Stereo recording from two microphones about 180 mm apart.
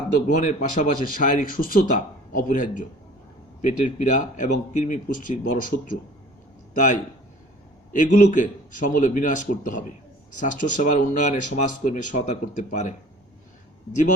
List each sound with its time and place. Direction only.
0.3 s speech: 45° left (ahead or behind)